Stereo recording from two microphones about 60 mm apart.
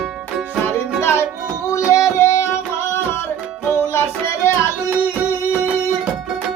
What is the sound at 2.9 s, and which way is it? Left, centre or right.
Music, left.